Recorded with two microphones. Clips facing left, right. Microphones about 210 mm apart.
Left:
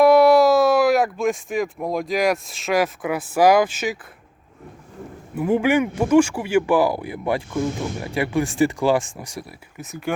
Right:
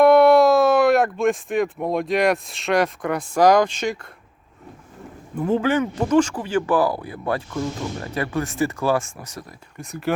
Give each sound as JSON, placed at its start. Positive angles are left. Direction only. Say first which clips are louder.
{"t": 0.0, "sound": "speech", "louder": "even", "side_deg": 0}
{"t": 5.3, "sound": "speech", "louder": "left 2 dB", "side_deg": 10}